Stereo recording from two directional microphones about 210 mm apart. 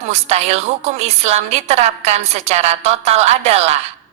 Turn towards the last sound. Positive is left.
turn(degrees=-30)  # may be behind; listen again after turning